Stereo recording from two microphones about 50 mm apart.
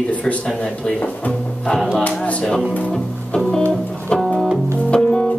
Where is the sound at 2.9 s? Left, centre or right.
Centre.